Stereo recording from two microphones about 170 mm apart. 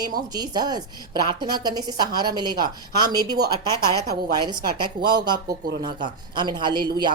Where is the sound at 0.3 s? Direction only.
25° right (ahead or behind).